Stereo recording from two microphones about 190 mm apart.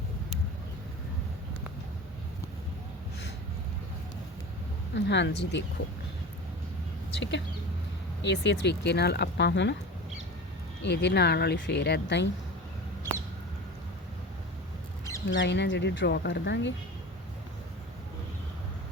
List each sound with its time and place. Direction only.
4.9 s speech: 70° left (ahead or behind)
7.1 s speech: 70° left (ahead or behind)
10.8 s speech: 65° left (ahead or behind)
15.3 s speech: 70° left (ahead or behind)